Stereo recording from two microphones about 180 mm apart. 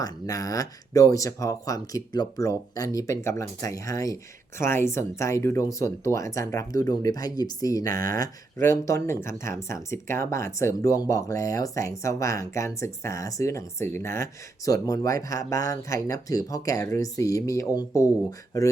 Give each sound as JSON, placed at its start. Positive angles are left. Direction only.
{"t": 0.0, "sound": "speech", "side_deg": 20}